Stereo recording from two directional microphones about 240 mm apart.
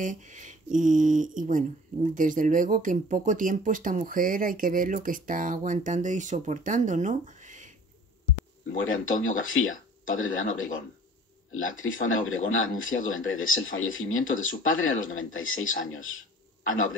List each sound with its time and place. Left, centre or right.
0.0 s speech: right
8.7 s a man's voice: left